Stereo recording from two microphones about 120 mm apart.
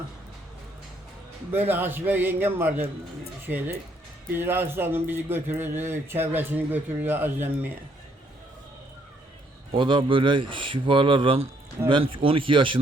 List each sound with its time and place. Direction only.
1.5 s a man's voice: 15° right (ahead or behind)
9.7 s speech: 45° right (ahead or behind)